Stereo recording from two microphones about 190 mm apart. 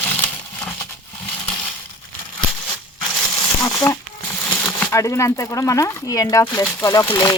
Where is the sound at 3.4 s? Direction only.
15° left (ahead or behind).